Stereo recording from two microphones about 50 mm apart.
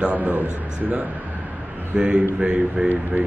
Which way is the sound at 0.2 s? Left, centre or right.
Right.